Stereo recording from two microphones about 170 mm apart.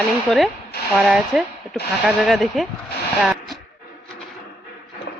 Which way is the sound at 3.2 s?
Centre (ahead or behind).